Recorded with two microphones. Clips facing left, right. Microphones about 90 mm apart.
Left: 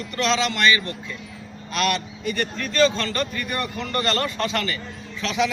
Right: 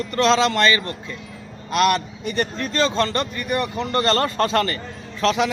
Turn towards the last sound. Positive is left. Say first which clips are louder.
# right 4 dB
turn(degrees=-40)  # may be behind; listen again after turning